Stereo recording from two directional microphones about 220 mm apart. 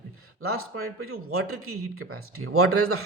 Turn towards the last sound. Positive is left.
turn(degrees=-80)